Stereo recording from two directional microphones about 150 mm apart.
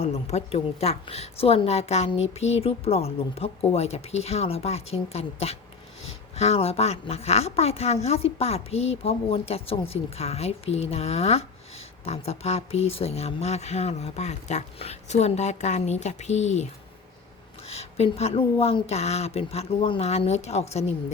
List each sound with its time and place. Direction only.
0.0 s a woman's voice: 45° left (ahead or behind)
17.7 s a woman's voice: 45° left (ahead or behind)